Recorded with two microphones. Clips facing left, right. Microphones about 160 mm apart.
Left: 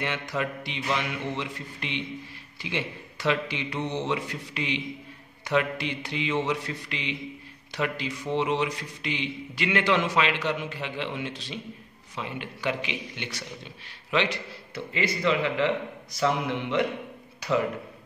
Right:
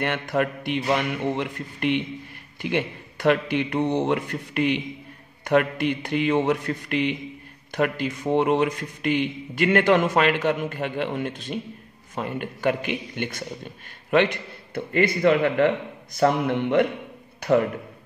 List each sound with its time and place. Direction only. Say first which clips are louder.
0.0 s a man's voice: right 6 dB; 55° right (ahead or behind)